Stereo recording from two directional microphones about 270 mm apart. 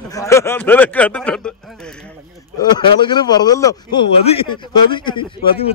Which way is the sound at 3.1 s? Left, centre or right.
Centre.